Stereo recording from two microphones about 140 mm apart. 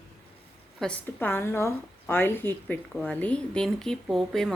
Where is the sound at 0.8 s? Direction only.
5° left (ahead or behind).